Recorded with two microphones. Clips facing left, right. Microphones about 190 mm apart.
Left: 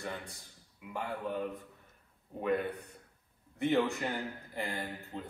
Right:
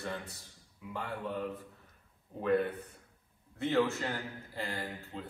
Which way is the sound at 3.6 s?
15° left (ahead or behind).